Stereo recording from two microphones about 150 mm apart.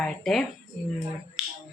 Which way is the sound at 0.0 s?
5° left (ahead or behind).